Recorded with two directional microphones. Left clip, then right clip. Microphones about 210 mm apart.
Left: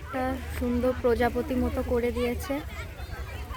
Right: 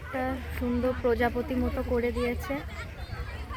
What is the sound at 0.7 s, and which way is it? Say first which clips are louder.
Speech: left 2 dB; 15° left (ahead or behind).